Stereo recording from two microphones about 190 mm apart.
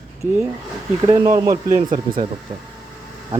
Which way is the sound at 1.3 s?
15° right (ahead or behind).